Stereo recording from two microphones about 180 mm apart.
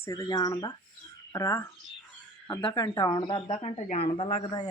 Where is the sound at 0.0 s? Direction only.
20° left (ahead or behind).